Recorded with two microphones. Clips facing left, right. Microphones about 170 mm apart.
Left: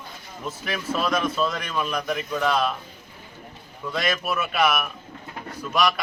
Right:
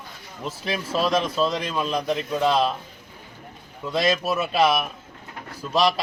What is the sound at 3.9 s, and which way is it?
A man's voice, 25° right (ahead or behind).